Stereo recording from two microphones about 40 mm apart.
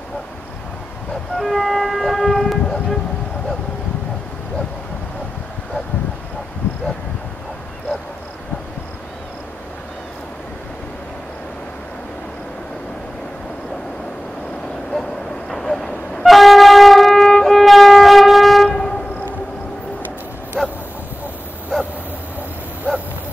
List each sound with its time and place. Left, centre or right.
1.4 s vehicle: centre
15.5 s wind instrument: centre
18.8 s train: centre
20.6 s bow-wow: centre